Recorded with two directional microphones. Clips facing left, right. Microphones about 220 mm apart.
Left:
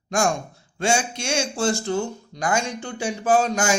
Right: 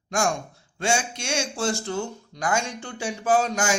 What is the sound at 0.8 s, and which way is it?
Speech, 30° left (ahead or behind).